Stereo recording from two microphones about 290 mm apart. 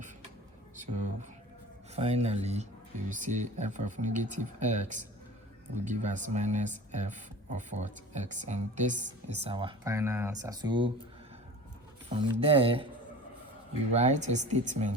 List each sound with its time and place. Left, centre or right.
2.0 s speech: right
12.0 s speech: centre
13.9 s speech: right